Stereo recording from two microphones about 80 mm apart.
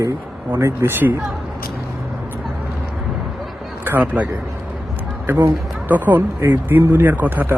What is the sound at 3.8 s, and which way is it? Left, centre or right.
Speech, right.